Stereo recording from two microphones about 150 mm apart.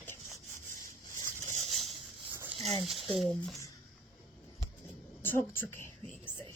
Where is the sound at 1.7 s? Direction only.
Centre (ahead or behind).